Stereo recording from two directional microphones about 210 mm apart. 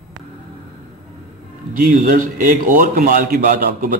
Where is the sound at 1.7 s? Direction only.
40° right (ahead or behind).